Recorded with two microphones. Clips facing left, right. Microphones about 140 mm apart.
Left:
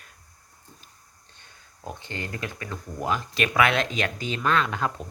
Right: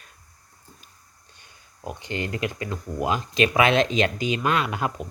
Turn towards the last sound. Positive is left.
turn(degrees=-15)  # may be behind; listen again after turning